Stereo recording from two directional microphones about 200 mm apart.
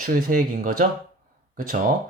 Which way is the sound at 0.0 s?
45° right (ahead or behind).